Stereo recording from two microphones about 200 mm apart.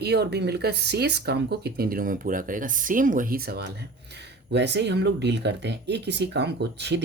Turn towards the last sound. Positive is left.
turn(degrees=-60)  # may be behind; listen again after turning